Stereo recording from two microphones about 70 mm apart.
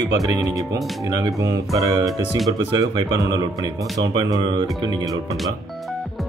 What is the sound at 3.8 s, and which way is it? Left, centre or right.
Speech, right.